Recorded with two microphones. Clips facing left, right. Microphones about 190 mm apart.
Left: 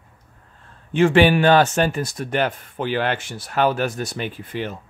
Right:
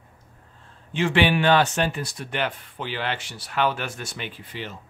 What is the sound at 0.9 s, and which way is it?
Speech, 50° left (ahead or behind).